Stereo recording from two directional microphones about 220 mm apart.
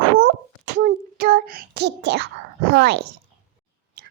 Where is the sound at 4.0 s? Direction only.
45° right (ahead or behind).